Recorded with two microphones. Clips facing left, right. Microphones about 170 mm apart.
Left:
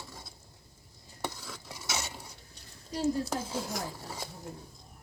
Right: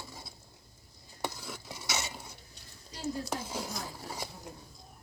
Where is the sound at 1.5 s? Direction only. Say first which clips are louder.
Right 1 dB; 5° right (ahead or behind).